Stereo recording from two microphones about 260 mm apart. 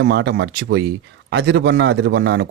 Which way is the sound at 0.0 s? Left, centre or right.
Right.